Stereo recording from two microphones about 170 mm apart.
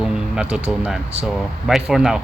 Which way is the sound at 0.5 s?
5° right (ahead or behind).